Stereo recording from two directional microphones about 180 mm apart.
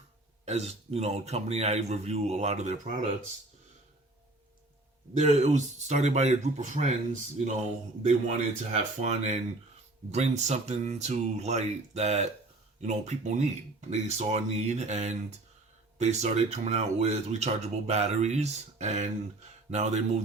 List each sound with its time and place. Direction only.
0.4 s speech: 35° right (ahead or behind)
5.1 s speech: 40° right (ahead or behind)